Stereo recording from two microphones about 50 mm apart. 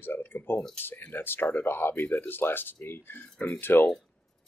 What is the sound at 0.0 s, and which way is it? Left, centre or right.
Speech, left.